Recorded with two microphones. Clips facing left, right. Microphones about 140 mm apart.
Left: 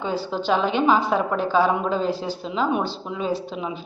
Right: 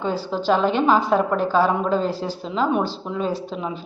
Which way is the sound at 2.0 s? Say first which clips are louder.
Even; 40° right (ahead or behind).